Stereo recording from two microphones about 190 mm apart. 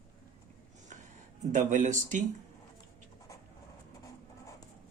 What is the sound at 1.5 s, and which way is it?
Speech, 40° right (ahead or behind).